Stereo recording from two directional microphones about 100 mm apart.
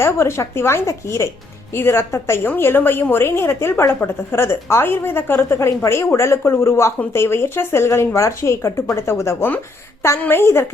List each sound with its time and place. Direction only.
0.0 s a woman's voice: 25° left (ahead or behind)